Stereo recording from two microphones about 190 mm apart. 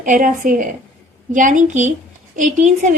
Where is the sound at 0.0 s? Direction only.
45° right (ahead or behind).